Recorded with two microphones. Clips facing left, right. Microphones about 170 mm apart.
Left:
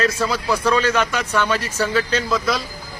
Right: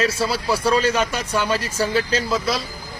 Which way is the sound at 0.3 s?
30° right (ahead or behind).